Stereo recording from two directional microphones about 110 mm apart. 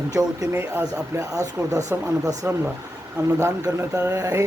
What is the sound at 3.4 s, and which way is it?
Speech, 30° right (ahead or behind).